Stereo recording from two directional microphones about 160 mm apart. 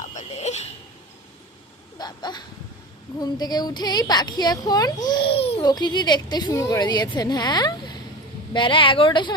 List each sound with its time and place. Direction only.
0.0 s a sound: 50° left (ahead or behind)
2.0 s a woman's voice: 25° left (ahead or behind)
5.3 s a woman's voice: 40° left (ahead or behind)
5.6 s a woman's voice: 25° left (ahead or behind)